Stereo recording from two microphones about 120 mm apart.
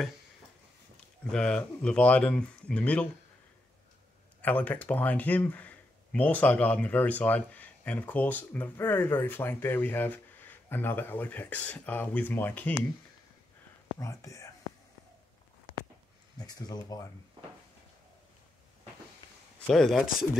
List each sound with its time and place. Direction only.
1.3 s speech: 10° left (ahead or behind)
4.4 s speech: 15° left (ahead or behind)
13.9 s speech: 25° left (ahead or behind)
16.3 s speech: 35° left (ahead or behind)
19.6 s speech: 5° left (ahead or behind)